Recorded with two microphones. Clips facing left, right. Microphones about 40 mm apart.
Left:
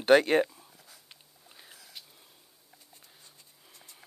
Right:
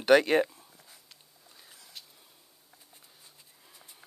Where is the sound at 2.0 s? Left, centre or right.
Centre.